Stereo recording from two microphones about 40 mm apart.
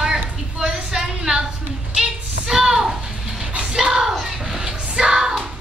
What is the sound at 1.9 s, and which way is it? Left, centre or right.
Music, centre.